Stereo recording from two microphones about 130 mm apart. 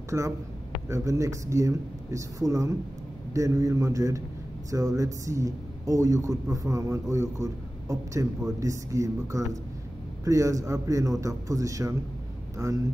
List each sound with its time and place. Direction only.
0.1 s a man's voice: 25° right (ahead or behind)